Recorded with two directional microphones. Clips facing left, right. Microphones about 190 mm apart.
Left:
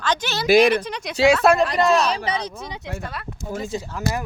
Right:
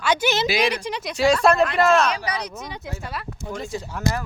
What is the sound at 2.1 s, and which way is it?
Speech, 25° left (ahead or behind).